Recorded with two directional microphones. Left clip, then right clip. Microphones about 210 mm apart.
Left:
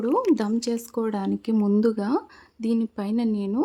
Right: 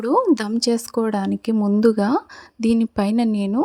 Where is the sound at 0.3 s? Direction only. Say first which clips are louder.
Right 5 dB; 30° right (ahead or behind).